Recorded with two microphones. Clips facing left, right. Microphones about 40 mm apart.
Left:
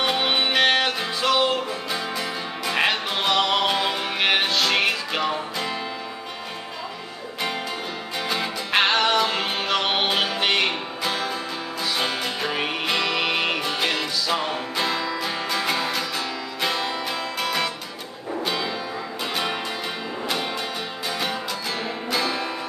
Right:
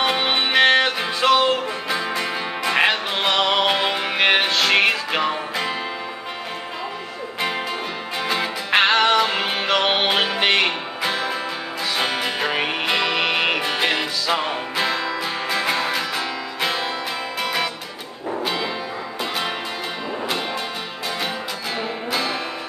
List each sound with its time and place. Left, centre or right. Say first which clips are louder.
0.0 s music: right 2 dB; centre
8.2 s music: right 3 dB; centre
22.1 s music: even; centre